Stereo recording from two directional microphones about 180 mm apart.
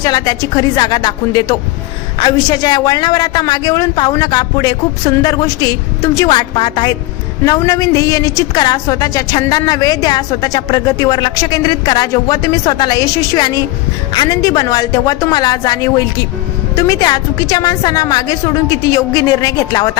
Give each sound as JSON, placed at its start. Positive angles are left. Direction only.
{"t": 0.0, "sound": "a woman's voice", "side_deg": 20}